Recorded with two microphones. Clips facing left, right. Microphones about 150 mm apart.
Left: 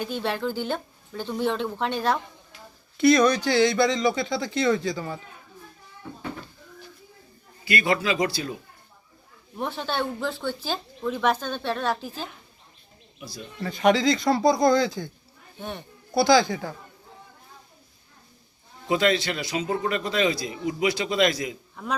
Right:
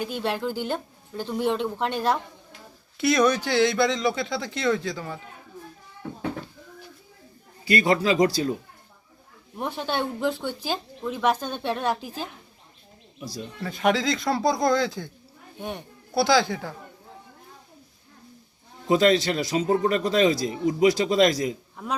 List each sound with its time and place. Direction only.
0.0 s speech: 10° right (ahead or behind)
7.6 s speech: 35° right (ahead or behind)
9.6 s speech: 10° right (ahead or behind)
13.6 s speech: centre (ahead or behind)
15.5 s speech: 10° right (ahead or behind)
16.1 s speech: centre (ahead or behind)
18.9 s speech: 35° right (ahead or behind)